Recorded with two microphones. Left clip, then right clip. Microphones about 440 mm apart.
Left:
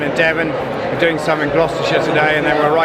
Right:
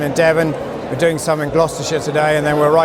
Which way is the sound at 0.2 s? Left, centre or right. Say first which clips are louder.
Right 3 dB; right.